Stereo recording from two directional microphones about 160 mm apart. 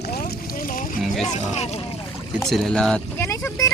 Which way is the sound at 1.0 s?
Centre (ahead or behind).